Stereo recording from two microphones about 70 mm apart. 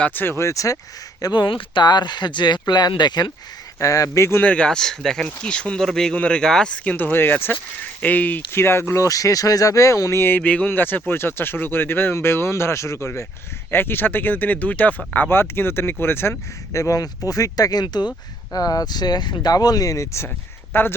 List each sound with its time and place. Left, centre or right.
0.0 s speech: left
0.3 s speech: left
1.2 s speech: left
3.8 s speech: left
4.4 s speech: centre
6.9 s speech: left
9.0 s speech: left
13.7 s speech: left
16.7 s speech: left
18.5 s speech: left
20.7 s speech: left